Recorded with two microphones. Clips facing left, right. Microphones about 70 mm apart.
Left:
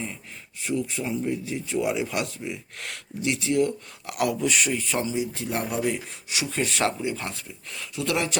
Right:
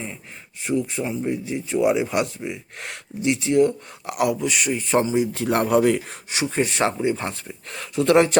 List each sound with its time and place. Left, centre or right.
0.6 s a man's voice: right; by 4.8 s centre
5.1 s speech: right
6.3 s speech: right